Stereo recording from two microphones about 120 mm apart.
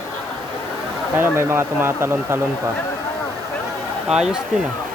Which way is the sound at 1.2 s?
20° right (ahead or behind).